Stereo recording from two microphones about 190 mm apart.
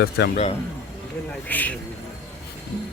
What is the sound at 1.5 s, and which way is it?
Speech, 10° left (ahead or behind).